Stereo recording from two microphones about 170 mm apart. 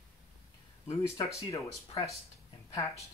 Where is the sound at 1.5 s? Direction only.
20° left (ahead or behind).